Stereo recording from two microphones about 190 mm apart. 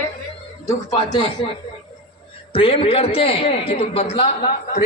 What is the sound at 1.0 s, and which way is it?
Speech, 20° left (ahead or behind).